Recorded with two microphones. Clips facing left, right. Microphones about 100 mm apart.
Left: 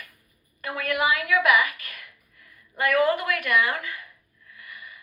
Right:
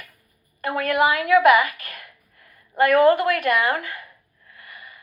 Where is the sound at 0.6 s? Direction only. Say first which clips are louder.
Right 6 dB; 40° right (ahead or behind).